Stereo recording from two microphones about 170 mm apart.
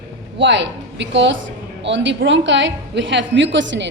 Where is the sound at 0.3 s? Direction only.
90° right.